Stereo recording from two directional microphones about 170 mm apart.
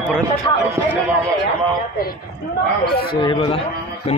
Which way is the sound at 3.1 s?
30° left (ahead or behind).